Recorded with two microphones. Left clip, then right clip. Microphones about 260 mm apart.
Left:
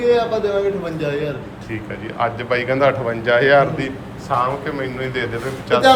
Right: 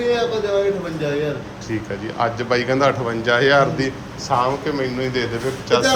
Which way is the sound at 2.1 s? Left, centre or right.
Centre.